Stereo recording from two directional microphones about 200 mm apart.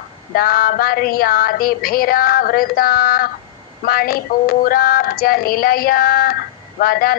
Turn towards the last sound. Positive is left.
turn(degrees=50)  # may be behind; listen again after turning